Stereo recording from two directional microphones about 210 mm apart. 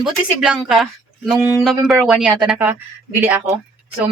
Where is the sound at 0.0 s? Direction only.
5° right (ahead or behind).